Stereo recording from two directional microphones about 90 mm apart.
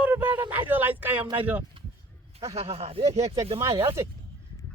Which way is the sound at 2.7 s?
90° right.